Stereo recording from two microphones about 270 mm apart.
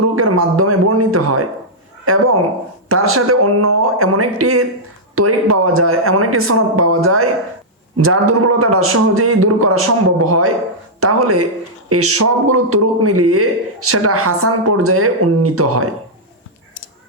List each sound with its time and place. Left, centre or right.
0.2 s a man's voice: right